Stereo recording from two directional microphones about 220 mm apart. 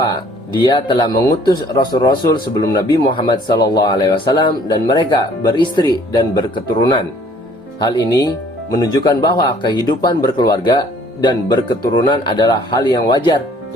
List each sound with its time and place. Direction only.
0.0 s speech: 20° left (ahead or behind)
7.8 s speech: 20° left (ahead or behind)